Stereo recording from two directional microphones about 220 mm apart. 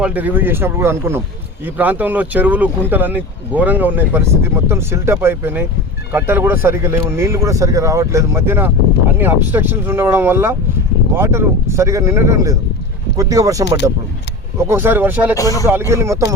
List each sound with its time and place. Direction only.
0.0 s speech: 5° right (ahead or behind)
15.4 s speech: 15° left (ahead or behind)
15.9 s speech: 10° right (ahead or behind)